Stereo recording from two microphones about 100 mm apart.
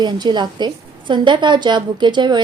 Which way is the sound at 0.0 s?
50° right (ahead or behind).